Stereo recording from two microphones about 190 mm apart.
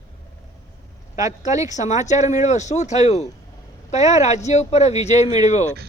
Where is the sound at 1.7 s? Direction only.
40° left (ahead or behind).